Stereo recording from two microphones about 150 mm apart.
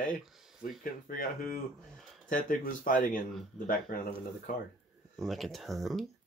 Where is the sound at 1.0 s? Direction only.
70° left (ahead or behind).